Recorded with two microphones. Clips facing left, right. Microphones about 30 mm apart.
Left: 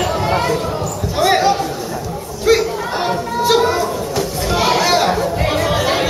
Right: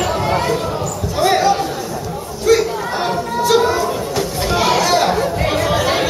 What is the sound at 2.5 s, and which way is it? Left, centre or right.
Chatter, left.